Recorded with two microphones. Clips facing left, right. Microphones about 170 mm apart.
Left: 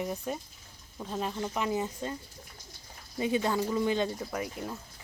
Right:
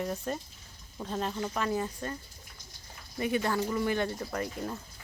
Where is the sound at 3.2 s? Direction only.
20° left (ahead or behind).